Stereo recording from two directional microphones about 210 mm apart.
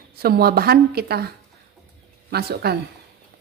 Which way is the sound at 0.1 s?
45° right (ahead or behind).